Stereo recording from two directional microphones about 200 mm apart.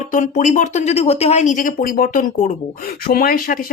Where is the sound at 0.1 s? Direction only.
40° left (ahead or behind).